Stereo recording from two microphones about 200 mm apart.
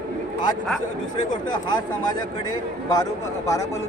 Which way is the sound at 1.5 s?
20° left (ahead or behind).